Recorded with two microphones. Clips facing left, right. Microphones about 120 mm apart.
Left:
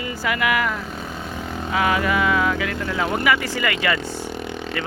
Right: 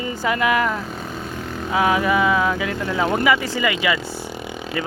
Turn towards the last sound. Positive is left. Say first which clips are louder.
# even
turn(degrees=-5)  # may be behind; listen again after turning